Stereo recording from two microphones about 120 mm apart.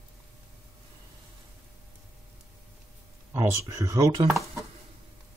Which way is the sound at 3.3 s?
25° right (ahead or behind).